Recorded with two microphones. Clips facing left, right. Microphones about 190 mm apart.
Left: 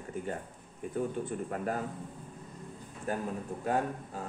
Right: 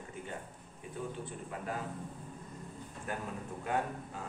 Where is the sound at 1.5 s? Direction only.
45° left (ahead or behind).